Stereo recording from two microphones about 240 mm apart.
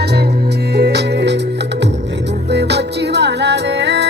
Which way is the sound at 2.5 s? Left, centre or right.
Right.